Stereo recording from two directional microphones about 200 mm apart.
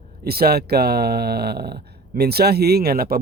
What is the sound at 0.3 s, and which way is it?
A man's voice, 50° right (ahead or behind).